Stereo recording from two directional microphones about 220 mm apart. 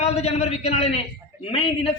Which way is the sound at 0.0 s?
30° left (ahead or behind).